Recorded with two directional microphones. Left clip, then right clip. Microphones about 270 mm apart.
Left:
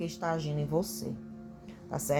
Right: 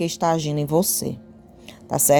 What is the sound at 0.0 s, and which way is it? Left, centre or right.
Speech, right.